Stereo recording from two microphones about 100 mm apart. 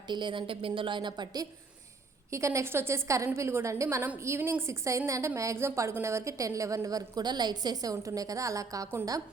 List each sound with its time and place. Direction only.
0.1 s a woman's voice: 50° right (ahead or behind)
2.3 s a woman's voice: 30° right (ahead or behind)